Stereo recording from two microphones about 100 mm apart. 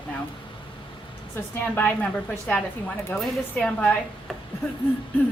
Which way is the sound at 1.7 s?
15° left (ahead or behind).